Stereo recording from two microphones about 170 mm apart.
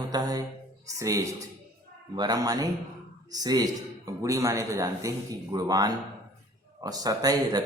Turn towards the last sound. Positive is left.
turn(degrees=-20)  # may be behind; listen again after turning